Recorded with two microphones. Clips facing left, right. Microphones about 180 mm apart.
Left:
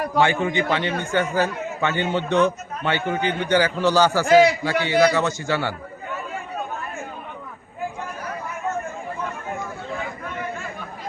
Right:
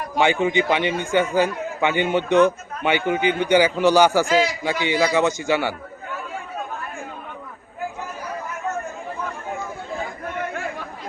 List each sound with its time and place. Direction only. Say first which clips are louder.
0.2 s a man's voice: right 2 dB; 15° right (ahead or behind)